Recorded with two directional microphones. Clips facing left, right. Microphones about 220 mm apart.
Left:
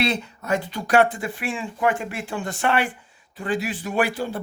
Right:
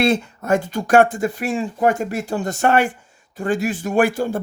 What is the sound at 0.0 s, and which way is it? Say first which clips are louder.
Speech: right 6 dB; 50° right (ahead or behind).